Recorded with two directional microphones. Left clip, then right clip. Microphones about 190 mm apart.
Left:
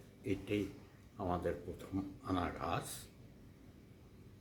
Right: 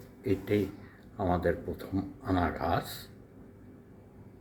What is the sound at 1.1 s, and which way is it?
Speech, 5° right (ahead or behind).